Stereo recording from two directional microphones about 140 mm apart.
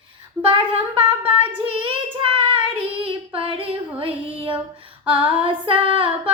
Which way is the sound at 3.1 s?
40° right (ahead or behind).